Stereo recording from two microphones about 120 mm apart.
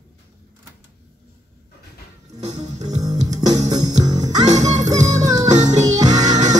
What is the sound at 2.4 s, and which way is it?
Music, 70° right (ahead or behind).